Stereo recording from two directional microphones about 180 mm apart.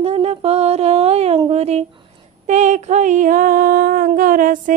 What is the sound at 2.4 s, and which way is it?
Female singing, 40° right (ahead or behind).